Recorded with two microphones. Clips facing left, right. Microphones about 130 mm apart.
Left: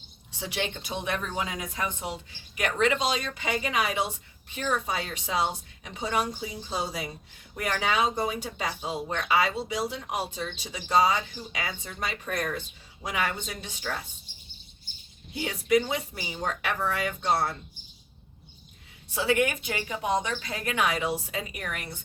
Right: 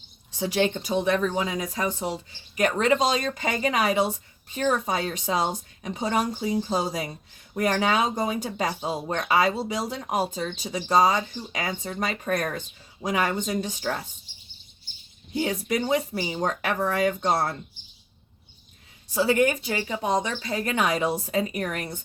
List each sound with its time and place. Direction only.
0.3 s speech: 40° right (ahead or behind)
13.0 s speech: 40° right (ahead or behind)
15.4 s speech: 40° right (ahead or behind)
19.1 s speech: 35° right (ahead or behind)